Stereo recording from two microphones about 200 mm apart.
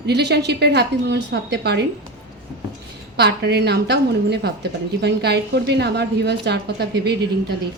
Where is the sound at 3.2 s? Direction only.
55° right (ahead or behind).